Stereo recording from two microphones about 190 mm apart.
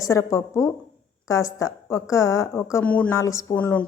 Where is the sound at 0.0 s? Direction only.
15° left (ahead or behind).